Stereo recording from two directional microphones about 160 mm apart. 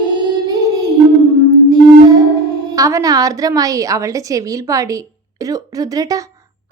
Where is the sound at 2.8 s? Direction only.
20° right (ahead or behind).